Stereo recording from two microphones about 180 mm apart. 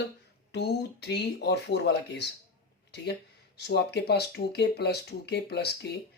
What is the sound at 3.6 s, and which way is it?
Speech, 65° left (ahead or behind).